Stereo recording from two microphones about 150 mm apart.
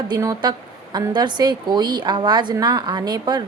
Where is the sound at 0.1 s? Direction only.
25° right (ahead or behind).